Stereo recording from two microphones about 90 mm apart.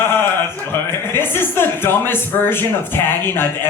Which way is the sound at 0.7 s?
25° left (ahead or behind).